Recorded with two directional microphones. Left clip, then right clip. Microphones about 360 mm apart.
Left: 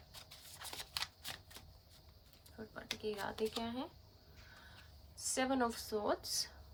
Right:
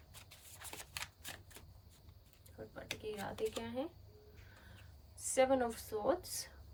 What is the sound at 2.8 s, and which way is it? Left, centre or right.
Speech, centre.